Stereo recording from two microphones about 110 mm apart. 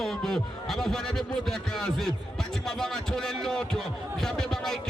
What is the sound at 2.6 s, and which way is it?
Music, 5° left (ahead or behind).